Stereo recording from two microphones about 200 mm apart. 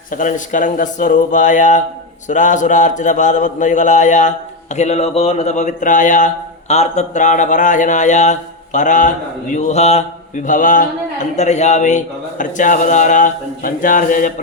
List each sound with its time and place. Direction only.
0.1 s a man's voice: 40° left (ahead or behind)